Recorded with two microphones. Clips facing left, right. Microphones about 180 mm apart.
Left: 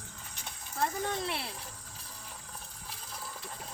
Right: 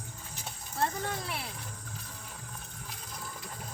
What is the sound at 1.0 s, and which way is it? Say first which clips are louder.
Speech: left 2 dB; 25° left (ahead or behind).